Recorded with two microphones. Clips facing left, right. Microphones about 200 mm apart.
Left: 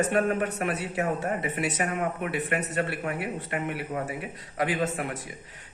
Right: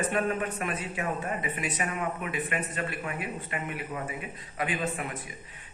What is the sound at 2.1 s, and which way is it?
A man's voice, 70° left (ahead or behind).